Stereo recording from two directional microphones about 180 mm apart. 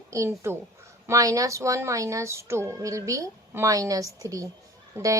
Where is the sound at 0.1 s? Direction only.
15° right (ahead or behind).